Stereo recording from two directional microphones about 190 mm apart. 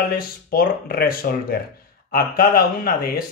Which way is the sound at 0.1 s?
50° left (ahead or behind).